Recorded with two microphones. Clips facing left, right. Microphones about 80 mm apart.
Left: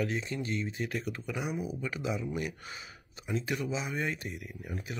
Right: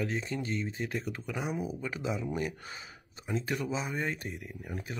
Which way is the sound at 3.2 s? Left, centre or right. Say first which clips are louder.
Even; right.